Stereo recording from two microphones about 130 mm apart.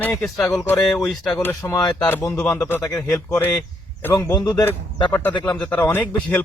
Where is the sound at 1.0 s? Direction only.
5° left (ahead or behind).